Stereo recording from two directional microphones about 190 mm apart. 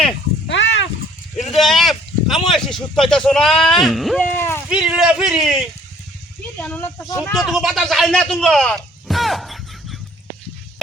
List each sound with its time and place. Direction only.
0.4 s pig: 70° left (ahead or behind)
1.5 s speech: centre (ahead or behind)
4.4 s speech: 10° left (ahead or behind)
4.7 s speech: 5° right (ahead or behind)
6.6 s speech: 10° left (ahead or behind)
7.3 s speech: centre (ahead or behind)